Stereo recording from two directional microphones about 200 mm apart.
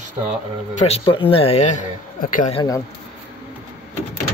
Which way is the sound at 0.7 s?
30° left (ahead or behind).